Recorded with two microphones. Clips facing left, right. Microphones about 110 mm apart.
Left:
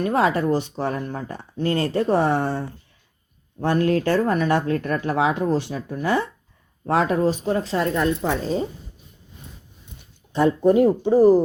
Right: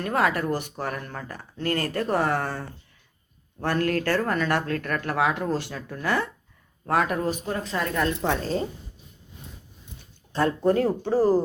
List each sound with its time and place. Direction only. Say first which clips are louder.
0.0 s speech: left 4 dB; 20° left (ahead or behind)
8.2 s speech: left 2 dB; 5° left (ahead or behind)
10.3 s speech: left 5 dB; 15° left (ahead or behind)